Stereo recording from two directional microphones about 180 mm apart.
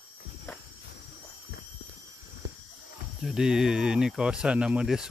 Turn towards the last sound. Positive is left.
turn(degrees=-5)  # may be behind; listen again after turning